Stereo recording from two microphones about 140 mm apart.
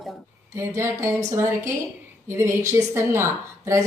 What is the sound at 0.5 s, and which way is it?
A woman's voice, 20° right (ahead or behind).